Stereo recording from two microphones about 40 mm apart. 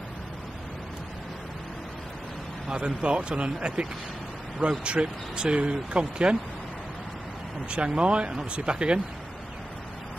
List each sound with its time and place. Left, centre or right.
2.7 s speech: right
7.7 s speech: right